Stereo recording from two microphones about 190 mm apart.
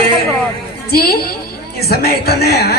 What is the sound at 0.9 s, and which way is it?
A man's voice, 55° left (ahead or behind).